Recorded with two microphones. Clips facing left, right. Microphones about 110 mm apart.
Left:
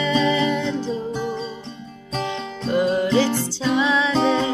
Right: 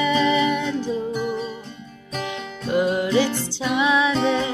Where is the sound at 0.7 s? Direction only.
25° left (ahead or behind).